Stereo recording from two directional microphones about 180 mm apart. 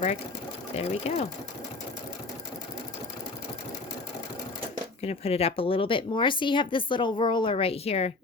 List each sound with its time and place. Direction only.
0.8 s speech: 35° left (ahead or behind)
5.0 s speech: 35° left (ahead or behind)